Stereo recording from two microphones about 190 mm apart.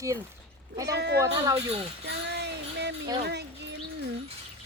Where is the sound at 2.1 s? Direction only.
65° right (ahead or behind).